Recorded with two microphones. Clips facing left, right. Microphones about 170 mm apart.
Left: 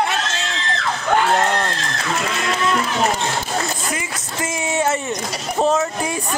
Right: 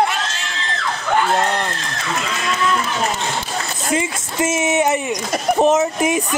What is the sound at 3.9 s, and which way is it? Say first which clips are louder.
Speech: right 6 dB; 25° right (ahead or behind).